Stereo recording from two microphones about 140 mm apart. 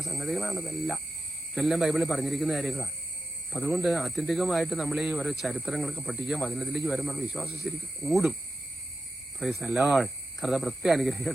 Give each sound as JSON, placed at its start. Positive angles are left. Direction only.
{"t": 0.0, "sound": "speech", "side_deg": 0}
{"t": 3.8, "sound": "speech", "side_deg": 0}
{"t": 6.4, "sound": "speech", "side_deg": 0}
{"t": 9.4, "sound": "speech", "side_deg": 0}
{"t": 9.6, "sound": "speech", "side_deg": -15}
{"t": 9.9, "sound": "speech", "side_deg": 0}